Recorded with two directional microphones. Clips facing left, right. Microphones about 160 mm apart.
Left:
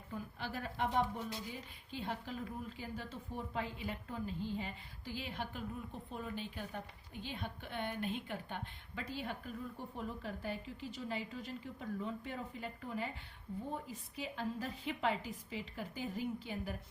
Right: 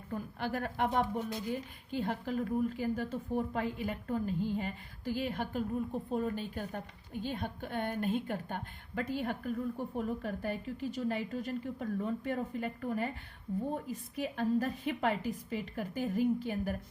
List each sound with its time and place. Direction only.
0.1 s a woman's voice: 55° right (ahead or behind)
14.2 s a woman's voice: 50° right (ahead or behind)